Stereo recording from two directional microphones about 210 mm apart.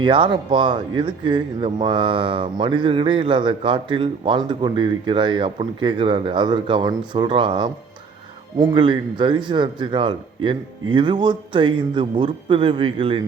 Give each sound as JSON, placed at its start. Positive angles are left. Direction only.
{"t": 0.0, "sound": "speech", "side_deg": -25}